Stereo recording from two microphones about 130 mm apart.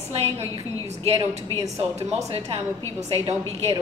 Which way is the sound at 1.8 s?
55° right (ahead or behind).